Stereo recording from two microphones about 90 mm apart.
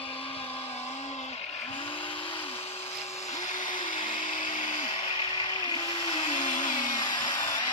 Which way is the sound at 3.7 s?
65° left (ahead or behind).